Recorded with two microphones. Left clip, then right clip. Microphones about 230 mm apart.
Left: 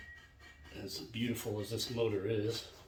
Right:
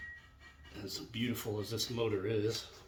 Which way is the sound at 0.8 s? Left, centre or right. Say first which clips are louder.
Right 1 dB; right.